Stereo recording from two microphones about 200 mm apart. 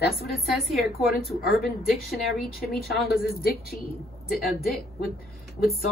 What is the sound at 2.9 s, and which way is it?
Speech, 50° left (ahead or behind).